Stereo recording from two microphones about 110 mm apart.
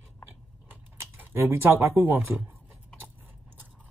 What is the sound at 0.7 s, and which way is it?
Speech, 20° right (ahead or behind).